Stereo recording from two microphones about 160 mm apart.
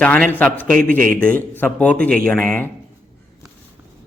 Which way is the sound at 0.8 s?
60° right (ahead or behind).